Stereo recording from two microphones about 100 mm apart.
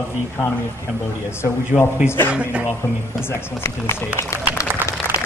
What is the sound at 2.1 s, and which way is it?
Speech, 20° left (ahead or behind).